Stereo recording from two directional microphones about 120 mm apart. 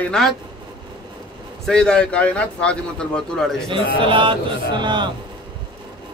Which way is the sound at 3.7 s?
45° right (ahead or behind).